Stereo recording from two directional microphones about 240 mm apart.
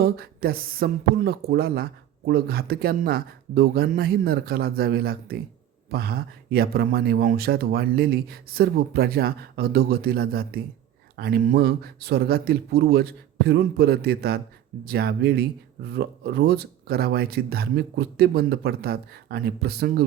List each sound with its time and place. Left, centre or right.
0.0 s speech: right